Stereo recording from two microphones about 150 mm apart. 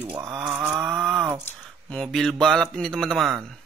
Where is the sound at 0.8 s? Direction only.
5° right (ahead or behind).